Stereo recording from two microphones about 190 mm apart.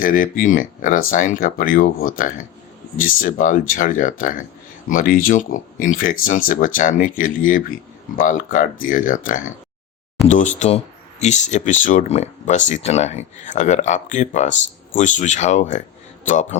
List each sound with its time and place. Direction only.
0.0 s speech: 45° left (ahead or behind)